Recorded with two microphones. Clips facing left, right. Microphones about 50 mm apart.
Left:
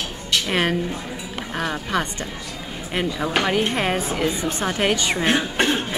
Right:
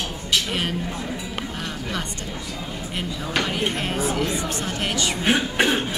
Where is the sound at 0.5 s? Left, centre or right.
Left.